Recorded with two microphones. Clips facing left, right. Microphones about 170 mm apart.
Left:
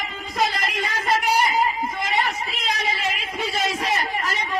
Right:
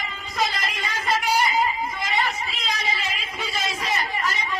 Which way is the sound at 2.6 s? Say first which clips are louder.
Left 4 dB; 60° left (ahead or behind).